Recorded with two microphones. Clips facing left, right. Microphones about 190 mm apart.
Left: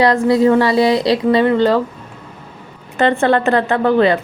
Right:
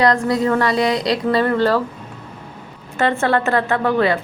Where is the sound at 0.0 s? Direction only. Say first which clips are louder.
Left 4 dB; 25° left (ahead or behind).